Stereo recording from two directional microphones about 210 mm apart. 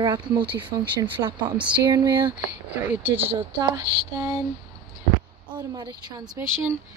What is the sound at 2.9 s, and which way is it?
Speech, 10° right (ahead or behind).